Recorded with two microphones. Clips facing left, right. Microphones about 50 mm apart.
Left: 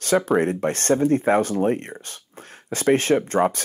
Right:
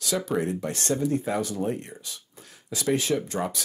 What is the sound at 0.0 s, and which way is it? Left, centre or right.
Speech, left.